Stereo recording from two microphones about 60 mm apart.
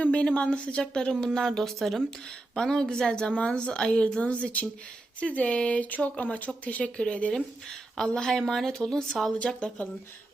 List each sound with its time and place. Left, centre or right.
0.0 s a woman's voice: centre